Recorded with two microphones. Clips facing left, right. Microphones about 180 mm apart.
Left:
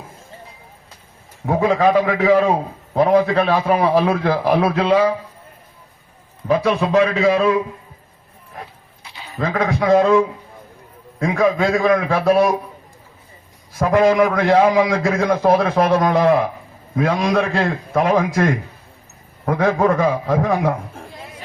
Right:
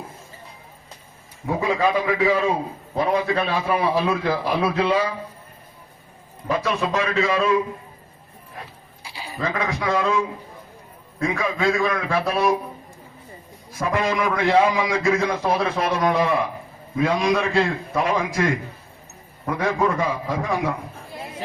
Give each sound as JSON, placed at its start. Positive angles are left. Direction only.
{"t": 1.5, "sound": "a man's voice", "side_deg": 55}
{"t": 6.5, "sound": "a man's voice", "side_deg": 55}
{"t": 9.0, "sound": "goat", "side_deg": -10}
{"t": 9.4, "sound": "a man's voice", "side_deg": 55}
{"t": 13.7, "sound": "a man's voice", "side_deg": 55}